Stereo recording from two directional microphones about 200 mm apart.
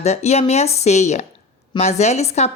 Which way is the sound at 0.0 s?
35° left (ahead or behind).